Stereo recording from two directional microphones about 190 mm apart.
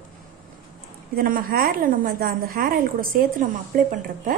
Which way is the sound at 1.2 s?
50° right (ahead or behind).